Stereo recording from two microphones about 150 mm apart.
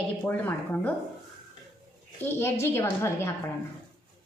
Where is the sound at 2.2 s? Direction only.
15° left (ahead or behind).